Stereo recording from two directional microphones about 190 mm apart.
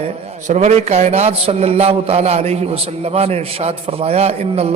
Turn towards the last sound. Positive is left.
turn(degrees=-35)  # may be behind; listen again after turning